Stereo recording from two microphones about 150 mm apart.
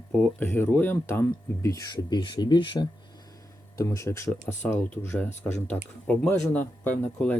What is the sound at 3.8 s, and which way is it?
Speech, 20° left (ahead or behind).